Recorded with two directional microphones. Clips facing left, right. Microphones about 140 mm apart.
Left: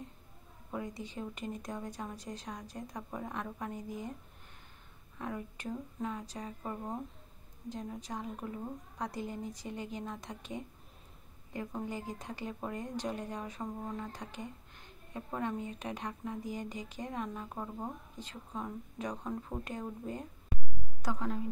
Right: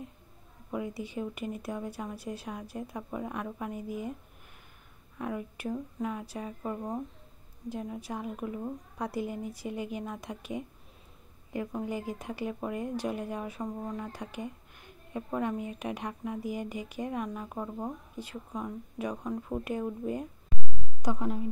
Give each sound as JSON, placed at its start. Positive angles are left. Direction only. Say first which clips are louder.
{"t": 0.7, "sound": "speech", "louder": "right 5 dB", "side_deg": -10}
{"t": 5.2, "sound": "speech", "louder": "right 5 dB", "side_deg": -10}